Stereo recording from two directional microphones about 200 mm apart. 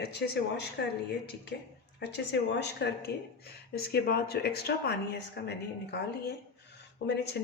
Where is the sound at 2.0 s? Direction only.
55° left (ahead or behind).